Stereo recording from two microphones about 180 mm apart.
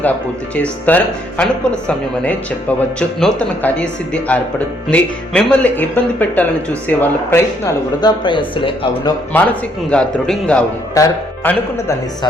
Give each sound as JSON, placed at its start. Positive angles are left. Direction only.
{"t": 0.5, "sound": "speech", "side_deg": 10}
{"t": 3.2, "sound": "speech", "side_deg": 5}
{"t": 9.3, "sound": "speech", "side_deg": 10}
{"t": 10.9, "sound": "speech", "side_deg": 15}